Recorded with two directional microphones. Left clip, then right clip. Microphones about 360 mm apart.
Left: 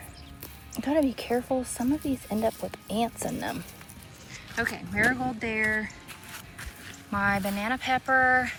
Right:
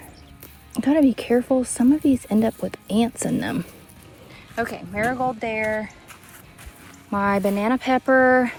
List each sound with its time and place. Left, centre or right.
0.8 s speech: centre
4.5 s speech: centre